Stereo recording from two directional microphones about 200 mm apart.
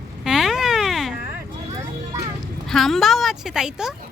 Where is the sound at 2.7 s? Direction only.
Centre (ahead or behind).